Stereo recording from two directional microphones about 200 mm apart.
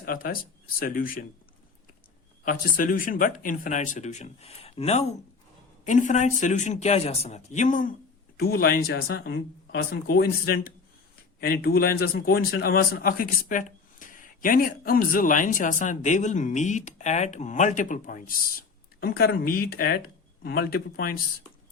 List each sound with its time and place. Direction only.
0.0 s speech: 45° left (ahead or behind)
2.4 s a man's voice: 45° left (ahead or behind)